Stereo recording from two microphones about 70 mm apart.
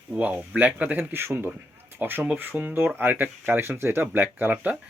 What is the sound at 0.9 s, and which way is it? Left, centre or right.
Speech, right.